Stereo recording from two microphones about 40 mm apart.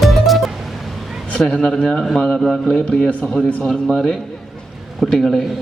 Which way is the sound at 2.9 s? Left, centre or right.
Left.